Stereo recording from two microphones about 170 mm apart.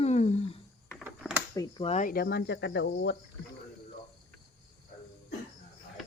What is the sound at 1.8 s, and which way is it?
Speech, 40° left (ahead or behind).